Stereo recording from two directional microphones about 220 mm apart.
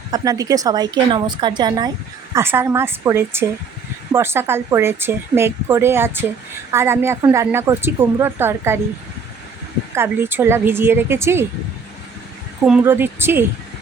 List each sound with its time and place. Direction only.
0.1 s a woman's voice: 15° right (ahead or behind)
9.9 s a woman's voice: 10° right (ahead or behind)
12.6 s a woman's voice: 5° right (ahead or behind)